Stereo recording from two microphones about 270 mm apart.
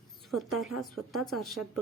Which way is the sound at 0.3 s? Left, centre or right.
Centre.